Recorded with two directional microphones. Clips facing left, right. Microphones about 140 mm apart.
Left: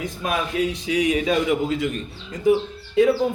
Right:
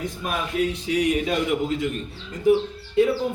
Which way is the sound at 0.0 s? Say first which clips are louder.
Left 3 dB; 90° left.